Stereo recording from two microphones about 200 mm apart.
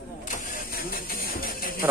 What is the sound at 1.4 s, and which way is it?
Music, 45° left (ahead or behind).